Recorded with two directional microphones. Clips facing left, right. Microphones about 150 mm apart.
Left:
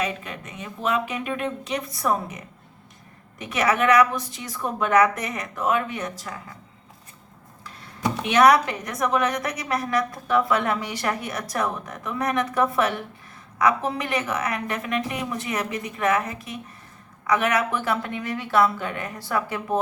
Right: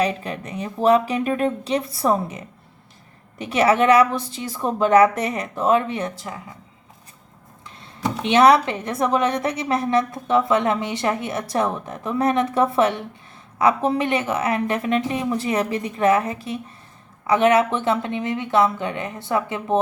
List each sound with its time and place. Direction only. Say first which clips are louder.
0.0 s speech: right 6 dB; 35° right (ahead or behind)
7.8 s speech: right 1 dB; 25° right (ahead or behind)